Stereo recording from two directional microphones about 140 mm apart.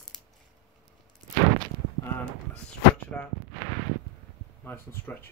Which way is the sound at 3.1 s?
10° left (ahead or behind).